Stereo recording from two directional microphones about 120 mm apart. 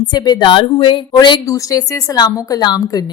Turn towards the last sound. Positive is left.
turn(degrees=35)  # may be behind; listen again after turning